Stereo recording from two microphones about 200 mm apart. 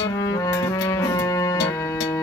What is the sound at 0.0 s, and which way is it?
Music, 15° left (ahead or behind).